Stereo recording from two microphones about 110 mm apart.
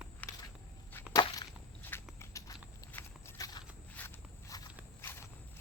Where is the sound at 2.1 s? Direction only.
30° left (ahead or behind).